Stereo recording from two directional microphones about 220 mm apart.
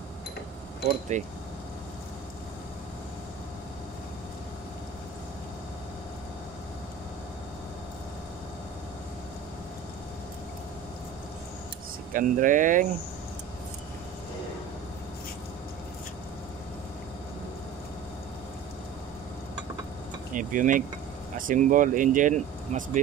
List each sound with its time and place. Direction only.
1.1 s speech: 35° right (ahead or behind)
12.1 s speech: 40° right (ahead or behind)
20.3 s speech: 35° right (ahead or behind)